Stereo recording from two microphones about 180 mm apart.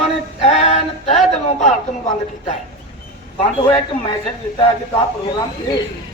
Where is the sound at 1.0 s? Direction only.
35° left (ahead or behind).